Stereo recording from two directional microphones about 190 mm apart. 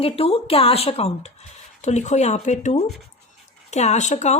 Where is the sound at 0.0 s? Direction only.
30° left (ahead or behind).